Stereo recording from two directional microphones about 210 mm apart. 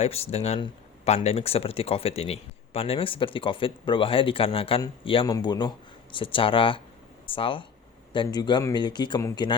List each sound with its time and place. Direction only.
0.0 s speech: 30° left (ahead or behind)